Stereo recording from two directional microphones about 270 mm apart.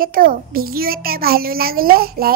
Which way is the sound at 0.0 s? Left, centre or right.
Right.